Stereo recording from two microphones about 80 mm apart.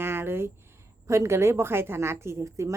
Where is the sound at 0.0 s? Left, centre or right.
Right.